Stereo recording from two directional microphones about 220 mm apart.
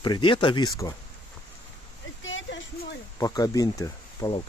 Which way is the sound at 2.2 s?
60° left (ahead or behind).